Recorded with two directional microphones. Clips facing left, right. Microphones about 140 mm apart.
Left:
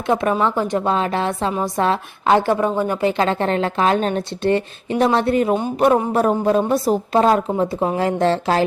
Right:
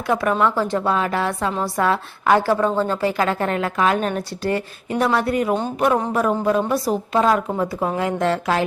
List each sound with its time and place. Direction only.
0.1 s a woman's voice: 20° left (ahead or behind)